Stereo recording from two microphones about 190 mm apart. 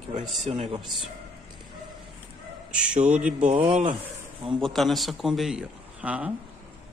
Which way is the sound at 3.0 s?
5° right (ahead or behind).